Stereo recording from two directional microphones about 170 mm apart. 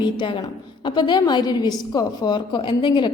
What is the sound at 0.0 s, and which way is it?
A woman's voice, 30° left (ahead or behind).